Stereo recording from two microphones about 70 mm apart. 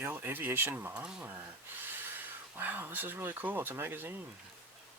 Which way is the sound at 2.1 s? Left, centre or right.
Right.